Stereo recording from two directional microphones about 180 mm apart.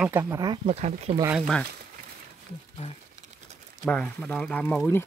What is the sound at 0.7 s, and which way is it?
Speech, 35° right (ahead or behind).